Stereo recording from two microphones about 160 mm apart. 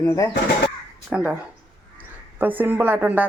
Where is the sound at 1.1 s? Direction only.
5° right (ahead or behind).